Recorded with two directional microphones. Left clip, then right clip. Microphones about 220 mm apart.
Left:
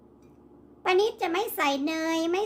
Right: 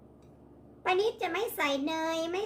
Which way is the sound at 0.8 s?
35° left (ahead or behind).